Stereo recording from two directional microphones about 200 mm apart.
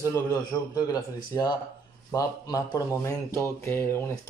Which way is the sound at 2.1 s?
15° left (ahead or behind).